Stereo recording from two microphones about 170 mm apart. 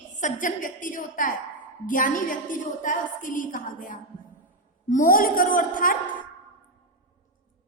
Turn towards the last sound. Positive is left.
turn(degrees=55)  # may be behind; listen again after turning